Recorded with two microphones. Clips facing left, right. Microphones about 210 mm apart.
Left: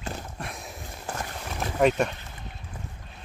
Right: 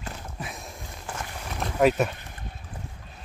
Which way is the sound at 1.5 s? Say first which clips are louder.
Right 1 dB; centre (ahead or behind).